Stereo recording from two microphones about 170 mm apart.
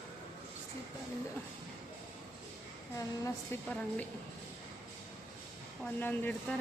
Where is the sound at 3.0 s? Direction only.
20° left (ahead or behind).